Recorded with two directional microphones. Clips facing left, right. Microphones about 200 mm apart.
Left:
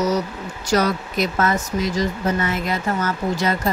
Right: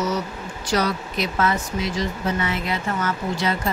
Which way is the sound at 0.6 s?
45° left (ahead or behind).